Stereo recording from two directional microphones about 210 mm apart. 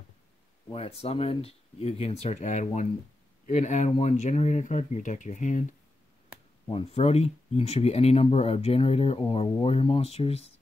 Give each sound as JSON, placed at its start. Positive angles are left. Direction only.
{"t": 0.7, "sound": "speech", "side_deg": 30}
{"t": 6.7, "sound": "speech", "side_deg": 30}